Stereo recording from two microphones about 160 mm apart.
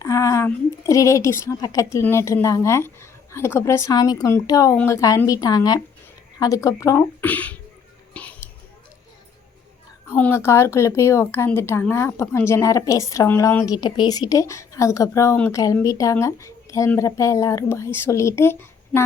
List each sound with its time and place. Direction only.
0.0 s a woman's voice: 20° left (ahead or behind)
8.1 s a sound: 10° left (ahead or behind)
10.1 s speech: 15° left (ahead or behind)